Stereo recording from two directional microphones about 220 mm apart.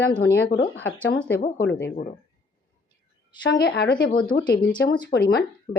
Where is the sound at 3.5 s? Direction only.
50° left (ahead or behind).